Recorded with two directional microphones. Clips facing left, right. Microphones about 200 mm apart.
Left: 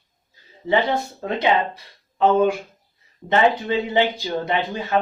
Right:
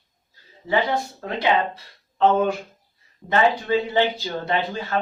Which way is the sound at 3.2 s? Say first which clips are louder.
Left 2 dB; 20° left (ahead or behind).